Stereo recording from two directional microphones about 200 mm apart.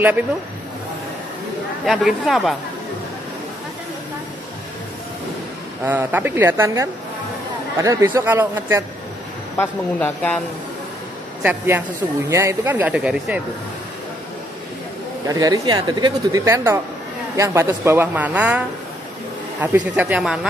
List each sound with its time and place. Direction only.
1.9 s speech: centre (ahead or behind)
5.9 s speech: 10° right (ahead or behind)
9.6 s speech: 10° left (ahead or behind)
11.4 s speech: 10° right (ahead or behind)
15.2 s speech: 15° right (ahead or behind)
19.6 s speech: 10° right (ahead or behind)